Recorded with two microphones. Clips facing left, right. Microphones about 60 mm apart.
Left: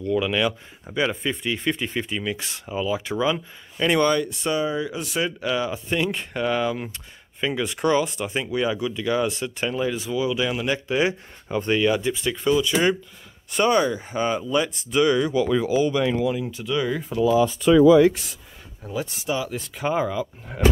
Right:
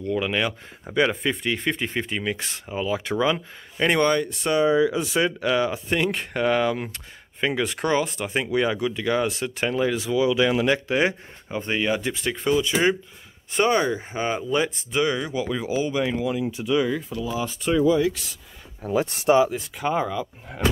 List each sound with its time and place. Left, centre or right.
0.0 s speech: right
0.9 s speech: right
3.7 s speech: right
10.9 s speech: right
11.5 s speech: right
12.0 s speech: right
12.3 s speech: right; by 16.8 s centre
17.1 s speech: centre
19.0 s speech: right
19.8 s speech: centre